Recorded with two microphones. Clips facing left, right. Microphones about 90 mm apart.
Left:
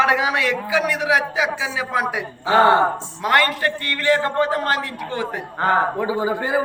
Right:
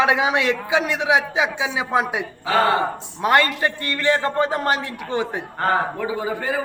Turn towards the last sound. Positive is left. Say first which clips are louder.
# left 3 dB
turn(degrees=20)  # may be behind; listen again after turning